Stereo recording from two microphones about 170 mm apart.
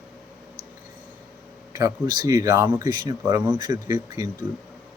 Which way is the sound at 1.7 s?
20° right (ahead or behind).